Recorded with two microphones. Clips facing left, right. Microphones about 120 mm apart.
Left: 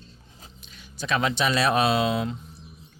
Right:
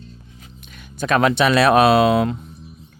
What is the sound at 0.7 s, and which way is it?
Speech, 55° right (ahead or behind).